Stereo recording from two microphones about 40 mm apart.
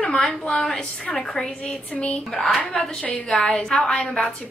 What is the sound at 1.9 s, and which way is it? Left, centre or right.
Speech, left.